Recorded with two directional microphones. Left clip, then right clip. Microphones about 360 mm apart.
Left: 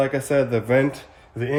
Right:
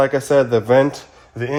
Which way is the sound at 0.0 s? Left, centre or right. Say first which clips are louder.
Right 6 dB; centre.